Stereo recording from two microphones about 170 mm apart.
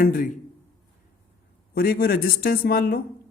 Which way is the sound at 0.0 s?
55° left (ahead or behind).